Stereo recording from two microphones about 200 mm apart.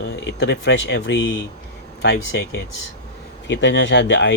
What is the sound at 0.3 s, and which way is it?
Speech, 60° left (ahead or behind).